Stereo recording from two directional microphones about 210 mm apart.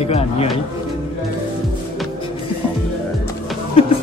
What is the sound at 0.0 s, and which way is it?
Speech, 30° left (ahead or behind).